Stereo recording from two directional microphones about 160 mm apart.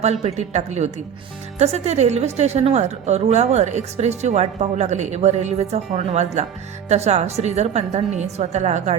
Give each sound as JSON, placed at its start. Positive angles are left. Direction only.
{"t": 0.0, "sound": "a woman's voice", "side_deg": -45}